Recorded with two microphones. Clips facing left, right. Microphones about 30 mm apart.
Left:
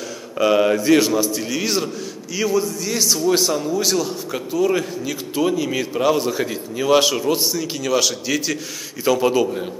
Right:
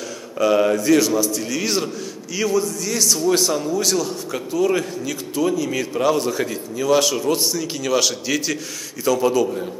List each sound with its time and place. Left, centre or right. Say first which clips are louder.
0.4 s a man's voice: left 1 dB; centre
1.5 s a man's voice: even; centre
5.3 s a man's voice: left 1 dB; left
6.8 s a man's voice: left 2 dB; left; by 8.5 s centre
9.0 s a man's voice: left 1 dB; left